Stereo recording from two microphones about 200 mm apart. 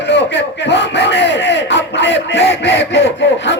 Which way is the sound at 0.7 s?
60° left (ahead or behind).